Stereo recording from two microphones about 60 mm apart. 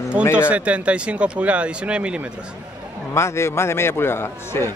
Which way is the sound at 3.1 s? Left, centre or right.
Left.